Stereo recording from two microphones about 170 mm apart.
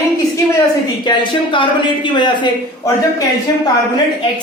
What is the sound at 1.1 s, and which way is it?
A man's voice, 30° left (ahead or behind).